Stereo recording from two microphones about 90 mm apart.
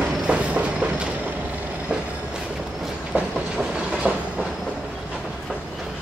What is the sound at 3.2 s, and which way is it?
Train, 10° right (ahead or behind).